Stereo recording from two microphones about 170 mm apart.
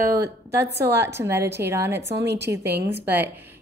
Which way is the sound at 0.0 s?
20° right (ahead or behind).